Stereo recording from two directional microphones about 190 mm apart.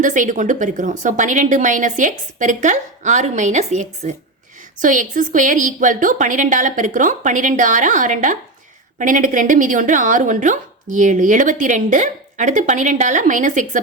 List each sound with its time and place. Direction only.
0.0 s a woman's voice: 40° right (ahead or behind)